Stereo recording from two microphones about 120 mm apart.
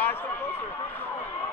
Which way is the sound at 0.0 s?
15° left (ahead or behind).